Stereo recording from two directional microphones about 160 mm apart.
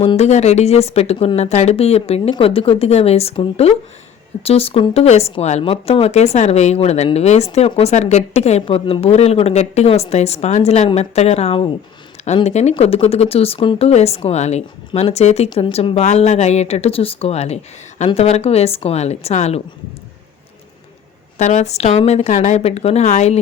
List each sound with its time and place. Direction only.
0.0 s a woman's voice: 40° left (ahead or behind)
21.3 s a woman's voice: 45° left (ahead or behind)